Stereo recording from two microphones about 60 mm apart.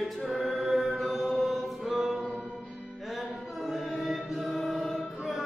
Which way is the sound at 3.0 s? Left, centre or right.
Centre.